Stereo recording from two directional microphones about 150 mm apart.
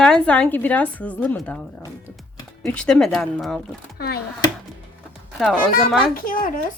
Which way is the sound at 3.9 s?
90° left.